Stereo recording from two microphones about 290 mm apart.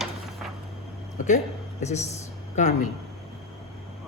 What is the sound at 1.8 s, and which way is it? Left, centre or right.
Speech, left.